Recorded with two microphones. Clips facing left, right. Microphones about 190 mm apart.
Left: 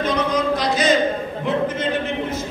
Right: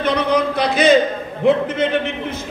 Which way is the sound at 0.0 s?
60° right (ahead or behind).